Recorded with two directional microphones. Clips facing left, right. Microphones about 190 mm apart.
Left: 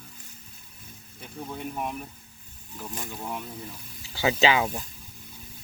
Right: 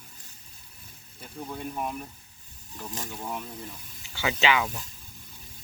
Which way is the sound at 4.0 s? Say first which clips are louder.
Left 4 dB; 35° left (ahead or behind).